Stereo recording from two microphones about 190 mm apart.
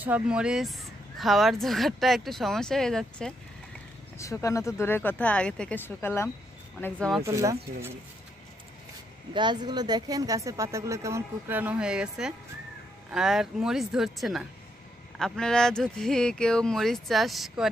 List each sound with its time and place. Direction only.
0.0 s speech: 5° right (ahead or behind)
4.2 s speech: 15° left (ahead or behind)
7.2 s a woman's voice: 15° right (ahead or behind)
9.3 s a woman's voice: 25° right (ahead or behind); by 17.6 s centre (ahead or behind)